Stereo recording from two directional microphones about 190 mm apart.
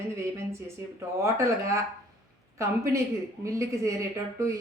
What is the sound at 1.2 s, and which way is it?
Speech, 15° right (ahead or behind).